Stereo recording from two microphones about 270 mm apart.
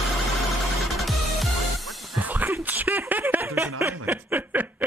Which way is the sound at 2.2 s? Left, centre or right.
Centre.